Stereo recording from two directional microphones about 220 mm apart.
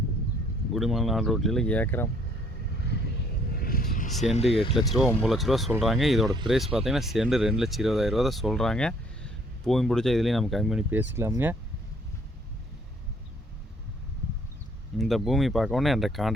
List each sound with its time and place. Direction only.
0.7 s speech: centre (ahead or behind)
3.5 s a sound: 45° left (ahead or behind)
4.4 s speech: 25° left (ahead or behind)
4.8 s speech: centre (ahead or behind)
14.9 s speech: centre (ahead or behind)